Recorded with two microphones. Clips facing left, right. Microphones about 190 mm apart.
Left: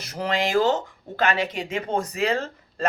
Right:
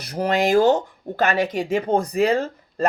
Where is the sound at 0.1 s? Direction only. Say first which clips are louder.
Right 5 dB; 45° right (ahead or behind).